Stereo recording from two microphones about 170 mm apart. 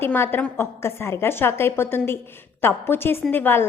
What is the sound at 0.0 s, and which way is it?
A woman's voice, 10° left (ahead or behind).